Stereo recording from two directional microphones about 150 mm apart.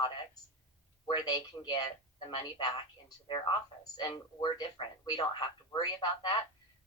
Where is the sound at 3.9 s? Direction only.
30° left (ahead or behind).